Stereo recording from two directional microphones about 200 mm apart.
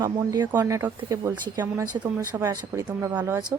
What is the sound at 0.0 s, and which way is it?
Speech, 20° right (ahead or behind).